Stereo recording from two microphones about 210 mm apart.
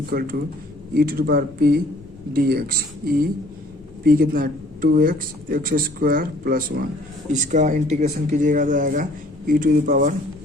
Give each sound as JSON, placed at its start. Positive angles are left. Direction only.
{"t": 0.1, "sound": "speech", "side_deg": -45}